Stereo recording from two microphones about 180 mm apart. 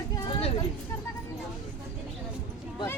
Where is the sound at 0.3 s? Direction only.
35° left (ahead or behind).